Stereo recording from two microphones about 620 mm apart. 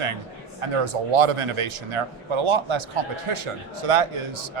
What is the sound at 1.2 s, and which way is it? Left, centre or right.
Speech, right.